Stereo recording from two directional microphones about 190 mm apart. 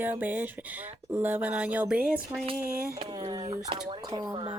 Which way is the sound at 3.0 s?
25° right (ahead or behind).